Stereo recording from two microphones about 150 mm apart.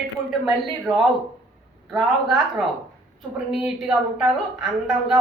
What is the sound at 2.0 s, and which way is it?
A man's voice, centre (ahead or behind).